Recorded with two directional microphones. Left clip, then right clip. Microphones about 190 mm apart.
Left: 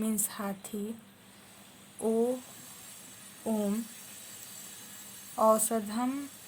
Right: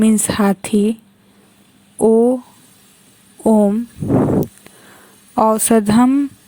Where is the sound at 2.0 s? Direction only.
45° right (ahead or behind).